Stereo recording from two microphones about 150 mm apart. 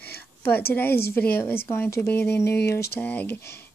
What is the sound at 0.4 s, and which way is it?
Speech, 15° left (ahead or behind).